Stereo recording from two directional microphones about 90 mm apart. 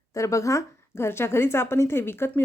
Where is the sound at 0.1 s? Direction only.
35° left (ahead or behind).